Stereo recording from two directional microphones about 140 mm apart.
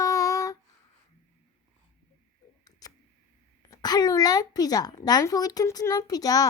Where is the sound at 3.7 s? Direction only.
30° left (ahead or behind).